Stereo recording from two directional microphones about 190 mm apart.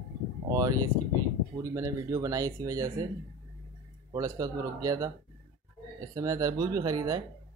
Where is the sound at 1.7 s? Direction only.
15° right (ahead or behind).